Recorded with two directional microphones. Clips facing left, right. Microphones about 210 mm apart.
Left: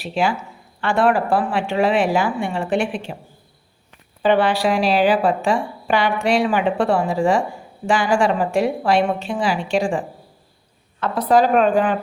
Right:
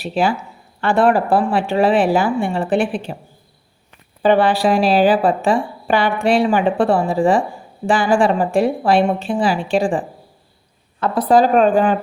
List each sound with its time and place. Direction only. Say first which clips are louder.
0.1 s a woman's voice: right 2 dB; 35° right (ahead or behind)
4.2 s a woman's voice: right 3 dB; 40° right (ahead or behind)
11.0 s a woman's voice: right 2 dB; 35° right (ahead or behind)